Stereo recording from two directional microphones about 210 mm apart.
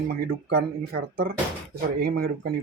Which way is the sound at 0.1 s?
50° right (ahead or behind).